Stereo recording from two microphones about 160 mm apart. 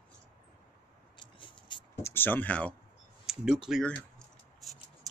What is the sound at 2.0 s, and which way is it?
Speech, 15° left (ahead or behind).